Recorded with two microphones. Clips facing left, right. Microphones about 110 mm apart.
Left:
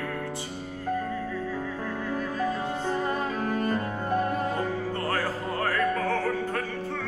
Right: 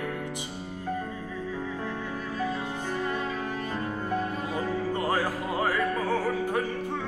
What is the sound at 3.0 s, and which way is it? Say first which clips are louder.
Music: left 2 dB; 40° left (ahead or behind).